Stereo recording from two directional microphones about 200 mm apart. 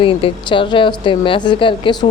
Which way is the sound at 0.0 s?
25° left (ahead or behind).